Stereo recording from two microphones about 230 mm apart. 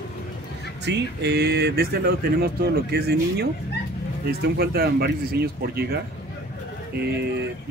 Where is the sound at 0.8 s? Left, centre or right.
Right.